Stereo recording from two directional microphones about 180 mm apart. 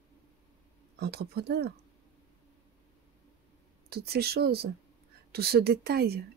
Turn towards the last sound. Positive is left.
turn(degrees=-60)  # may be behind; listen again after turning